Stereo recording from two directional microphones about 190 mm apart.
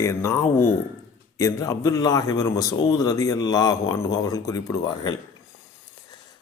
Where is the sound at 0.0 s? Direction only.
15° left (ahead or behind).